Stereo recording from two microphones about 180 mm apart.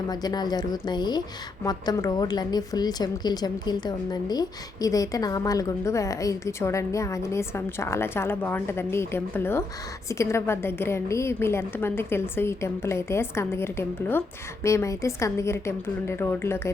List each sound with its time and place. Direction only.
0.1 s a woman's voice: 20° left (ahead or behind)